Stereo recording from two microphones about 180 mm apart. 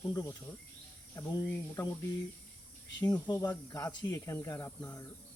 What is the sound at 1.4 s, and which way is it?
Speech, 15° left (ahead or behind).